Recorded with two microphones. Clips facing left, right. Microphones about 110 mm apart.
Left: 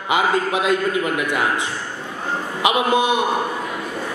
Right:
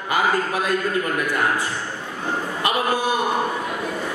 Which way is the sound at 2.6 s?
20° left (ahead or behind).